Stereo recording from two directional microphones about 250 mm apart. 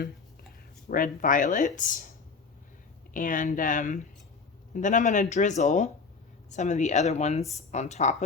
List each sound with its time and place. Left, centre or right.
0.9 s speech: left
3.1 s speech: left